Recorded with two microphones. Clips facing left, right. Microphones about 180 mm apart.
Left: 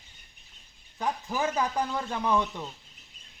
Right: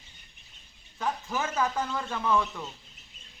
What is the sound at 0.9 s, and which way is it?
Speech, 15° left (ahead or behind).